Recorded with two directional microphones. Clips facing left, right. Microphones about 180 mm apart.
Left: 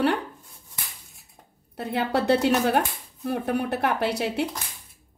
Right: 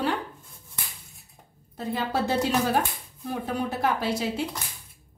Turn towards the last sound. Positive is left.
turn(degrees=65)  # may be behind; listen again after turning